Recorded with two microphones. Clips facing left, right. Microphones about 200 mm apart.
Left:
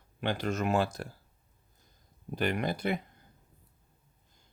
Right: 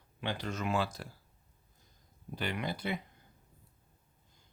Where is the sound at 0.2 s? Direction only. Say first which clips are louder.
Left 6 dB; 50° left (ahead or behind).